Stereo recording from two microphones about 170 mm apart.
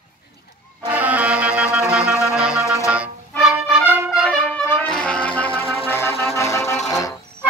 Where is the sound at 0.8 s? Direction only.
10° right (ahead or behind).